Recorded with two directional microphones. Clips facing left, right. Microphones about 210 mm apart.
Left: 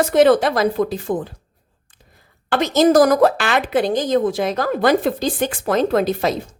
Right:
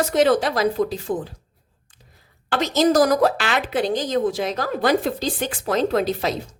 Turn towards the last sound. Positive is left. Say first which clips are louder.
# left 4 dB
turn(degrees=50)  # may be behind; listen again after turning